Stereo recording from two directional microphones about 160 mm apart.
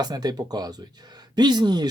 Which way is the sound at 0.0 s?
25° right (ahead or behind).